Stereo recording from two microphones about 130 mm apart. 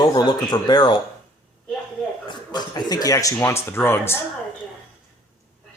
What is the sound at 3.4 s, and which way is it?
Speech, 20° left (ahead or behind).